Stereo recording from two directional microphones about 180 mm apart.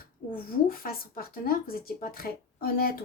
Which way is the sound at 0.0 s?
55° left (ahead or behind).